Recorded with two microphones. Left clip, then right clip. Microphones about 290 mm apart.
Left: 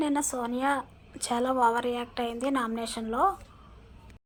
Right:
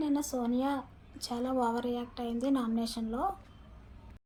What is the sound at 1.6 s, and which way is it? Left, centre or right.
A woman's voice, centre.